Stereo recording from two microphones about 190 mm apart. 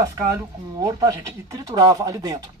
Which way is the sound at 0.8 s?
15° right (ahead or behind).